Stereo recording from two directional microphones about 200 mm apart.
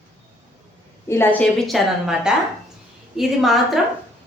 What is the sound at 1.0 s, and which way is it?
A woman's voice, 10° left (ahead or behind).